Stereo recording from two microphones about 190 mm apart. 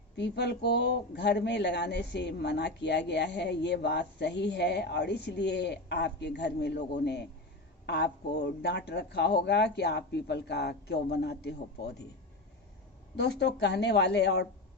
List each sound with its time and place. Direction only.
0.2 s speech: 60° left (ahead or behind)
13.1 s speech: 60° left (ahead or behind)